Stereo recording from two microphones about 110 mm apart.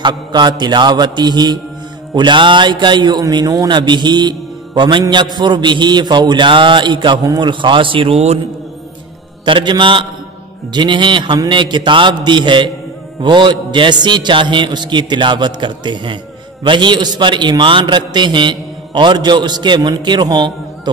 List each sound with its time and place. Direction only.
0.0 s mantra: 40° right (ahead or behind)
2.1 s a man's voice: 45° right (ahead or behind)
9.4 s a man's voice: 45° right (ahead or behind)